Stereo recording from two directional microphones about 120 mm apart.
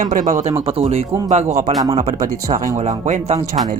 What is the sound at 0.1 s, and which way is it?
Speech, 90° right.